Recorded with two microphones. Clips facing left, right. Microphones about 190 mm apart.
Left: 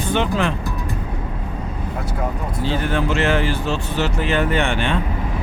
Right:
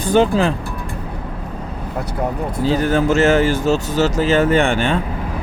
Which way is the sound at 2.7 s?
40° right (ahead or behind).